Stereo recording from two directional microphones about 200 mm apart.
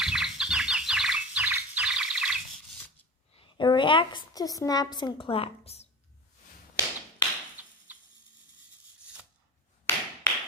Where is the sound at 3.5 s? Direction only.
20° left (ahead or behind).